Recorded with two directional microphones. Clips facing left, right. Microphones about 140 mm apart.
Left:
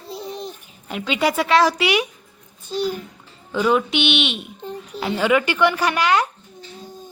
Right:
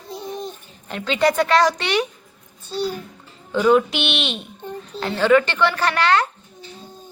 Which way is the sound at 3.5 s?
Centre (ahead or behind).